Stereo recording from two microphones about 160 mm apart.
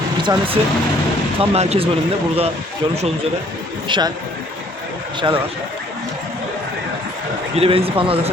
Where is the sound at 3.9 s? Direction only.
30° right (ahead or behind).